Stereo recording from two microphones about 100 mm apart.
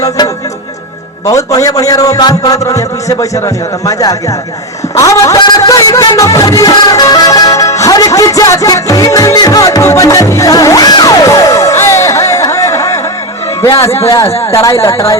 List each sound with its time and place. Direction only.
1.3 s a man's voice: 35° left (ahead or behind)
4.9 s music: 35° left (ahead or behind)
14.1 s a man's voice: 35° left (ahead or behind)